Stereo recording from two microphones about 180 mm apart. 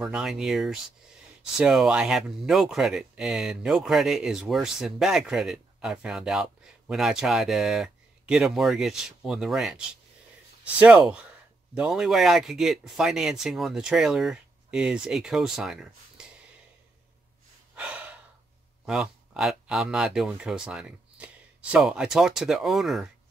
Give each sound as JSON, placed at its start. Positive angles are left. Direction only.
{"t": 0.0, "sound": "speech", "side_deg": -5}
{"t": 11.7, "sound": "speech", "side_deg": -5}
{"t": 17.7, "sound": "breathing", "side_deg": -5}
{"t": 18.9, "sound": "speech", "side_deg": -5}